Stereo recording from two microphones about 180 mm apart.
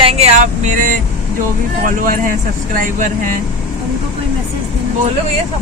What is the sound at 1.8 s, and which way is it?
Speech, 50° right (ahead or behind).